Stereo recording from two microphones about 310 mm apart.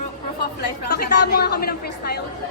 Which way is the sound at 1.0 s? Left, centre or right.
Left.